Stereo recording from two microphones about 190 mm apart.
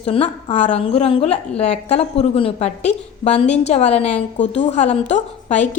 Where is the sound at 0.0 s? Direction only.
30° left (ahead or behind).